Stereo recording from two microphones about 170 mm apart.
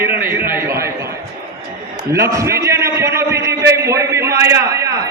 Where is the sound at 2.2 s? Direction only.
15° right (ahead or behind).